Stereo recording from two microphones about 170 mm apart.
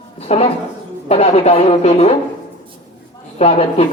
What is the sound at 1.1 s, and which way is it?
Speech, 35° left (ahead or behind).